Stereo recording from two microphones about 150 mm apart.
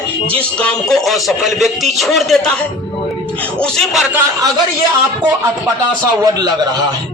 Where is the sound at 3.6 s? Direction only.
Centre (ahead or behind).